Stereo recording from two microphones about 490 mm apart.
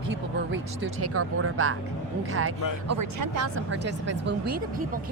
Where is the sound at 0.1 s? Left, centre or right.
Right.